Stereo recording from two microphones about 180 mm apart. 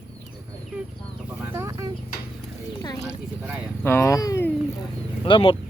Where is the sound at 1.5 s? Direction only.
15° right (ahead or behind).